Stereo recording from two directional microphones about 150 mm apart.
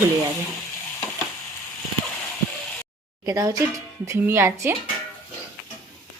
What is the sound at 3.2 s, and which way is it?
Speech, 20° right (ahead or behind).